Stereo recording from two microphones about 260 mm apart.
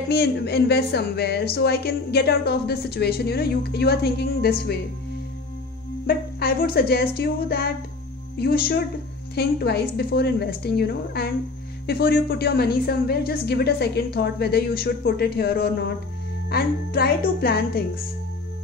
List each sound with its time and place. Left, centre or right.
0.1 s speech: left
6.0 s speech: left